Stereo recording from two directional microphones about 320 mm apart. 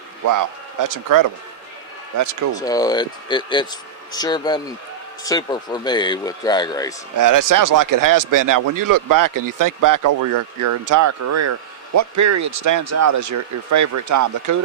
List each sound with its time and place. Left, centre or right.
0.3 s speech: right
2.1 s speech: right
2.6 s speech: centre
7.2 s speech: right